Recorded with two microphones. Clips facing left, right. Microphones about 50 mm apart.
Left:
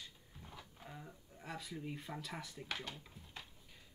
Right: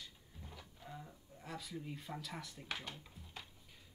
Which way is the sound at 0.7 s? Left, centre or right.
Centre.